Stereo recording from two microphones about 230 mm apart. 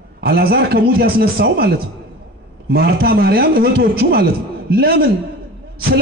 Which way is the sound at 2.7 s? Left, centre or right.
Right.